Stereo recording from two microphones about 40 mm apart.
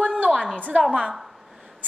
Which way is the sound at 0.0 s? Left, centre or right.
Right.